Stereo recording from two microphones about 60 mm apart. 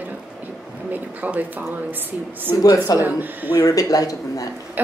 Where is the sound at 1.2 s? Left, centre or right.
Right.